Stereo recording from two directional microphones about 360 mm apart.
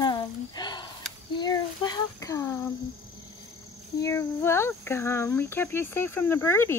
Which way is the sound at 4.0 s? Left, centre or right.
Centre.